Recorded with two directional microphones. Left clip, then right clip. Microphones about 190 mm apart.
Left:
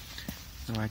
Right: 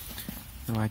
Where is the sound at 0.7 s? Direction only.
40° right (ahead or behind).